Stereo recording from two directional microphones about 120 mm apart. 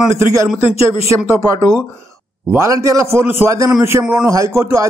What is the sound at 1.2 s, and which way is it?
A man's voice, 25° right (ahead or behind).